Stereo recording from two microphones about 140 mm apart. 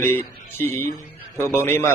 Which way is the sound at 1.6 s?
15° left (ahead or behind).